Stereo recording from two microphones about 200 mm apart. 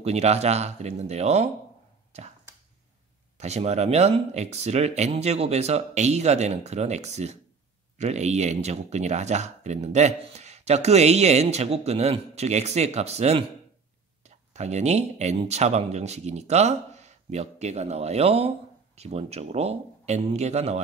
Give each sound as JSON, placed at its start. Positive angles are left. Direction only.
{"t": 0.0, "sound": "speech", "side_deg": -35}
{"t": 3.3, "sound": "speech", "side_deg": -35}